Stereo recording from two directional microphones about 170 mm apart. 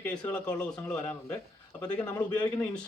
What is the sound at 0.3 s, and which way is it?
A man's voice, 5° left (ahead or behind).